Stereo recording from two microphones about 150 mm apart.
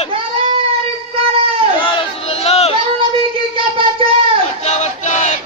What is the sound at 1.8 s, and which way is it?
Crowd, 35° left (ahead or behind).